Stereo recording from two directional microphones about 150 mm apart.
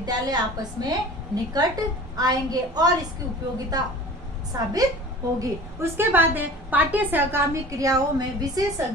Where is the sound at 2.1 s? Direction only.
25° right (ahead or behind).